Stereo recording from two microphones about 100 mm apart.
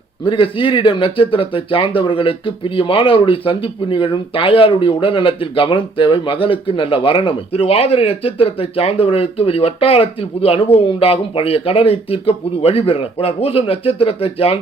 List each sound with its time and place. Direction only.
0.3 s speech: 60° left (ahead or behind)